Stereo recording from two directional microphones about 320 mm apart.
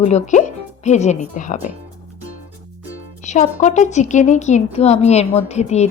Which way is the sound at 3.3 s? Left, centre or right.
Left.